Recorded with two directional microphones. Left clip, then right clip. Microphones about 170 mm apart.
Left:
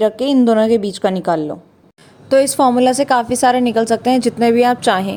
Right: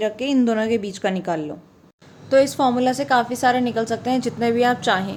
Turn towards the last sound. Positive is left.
turn(degrees=45)  # may be behind; listen again after turning